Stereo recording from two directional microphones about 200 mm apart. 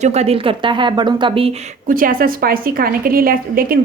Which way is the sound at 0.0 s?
35° right (ahead or behind).